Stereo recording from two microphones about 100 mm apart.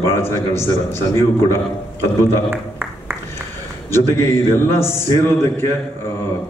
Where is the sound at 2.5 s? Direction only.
25° right (ahead or behind).